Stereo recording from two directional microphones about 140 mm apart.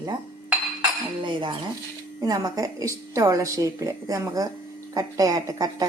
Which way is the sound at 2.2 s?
25° right (ahead or behind).